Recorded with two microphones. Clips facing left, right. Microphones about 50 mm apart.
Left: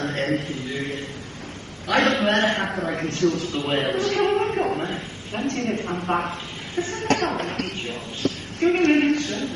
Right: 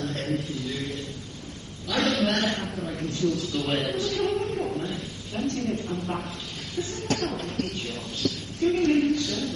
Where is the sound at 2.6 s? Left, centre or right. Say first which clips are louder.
Left 6 dB; left.